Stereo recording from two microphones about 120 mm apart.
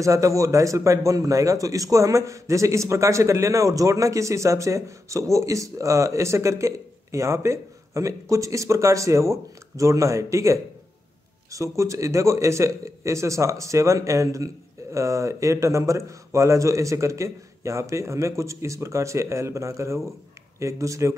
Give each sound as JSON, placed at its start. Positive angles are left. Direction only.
{"t": 0.0, "sound": "speech", "side_deg": -25}